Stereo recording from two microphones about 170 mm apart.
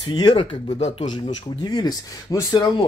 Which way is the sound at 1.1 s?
25° left (ahead or behind).